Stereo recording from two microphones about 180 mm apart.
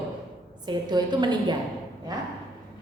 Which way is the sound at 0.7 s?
25° right (ahead or behind).